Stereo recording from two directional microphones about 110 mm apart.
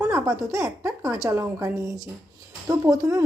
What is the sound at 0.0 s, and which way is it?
A woman's voice, 25° right (ahead or behind).